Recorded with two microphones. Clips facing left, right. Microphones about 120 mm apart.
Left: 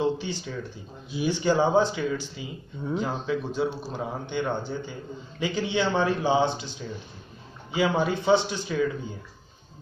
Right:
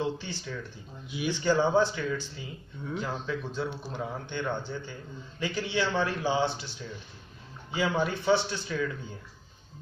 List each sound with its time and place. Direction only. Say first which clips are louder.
0.0 s a man's voice: left 6 dB; 15° left (ahead or behind)
7.7 s speech: left 4 dB; 15° left (ahead or behind)